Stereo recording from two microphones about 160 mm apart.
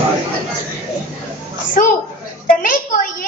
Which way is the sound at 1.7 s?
55° left (ahead or behind).